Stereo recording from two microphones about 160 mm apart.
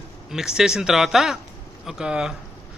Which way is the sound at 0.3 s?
5° right (ahead or behind).